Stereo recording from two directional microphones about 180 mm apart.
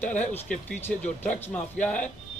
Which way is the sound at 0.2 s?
10° left (ahead or behind).